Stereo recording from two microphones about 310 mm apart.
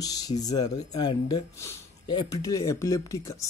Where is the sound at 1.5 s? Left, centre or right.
Centre.